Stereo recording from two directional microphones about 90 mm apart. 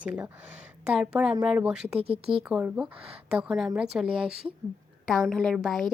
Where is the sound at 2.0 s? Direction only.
90° right.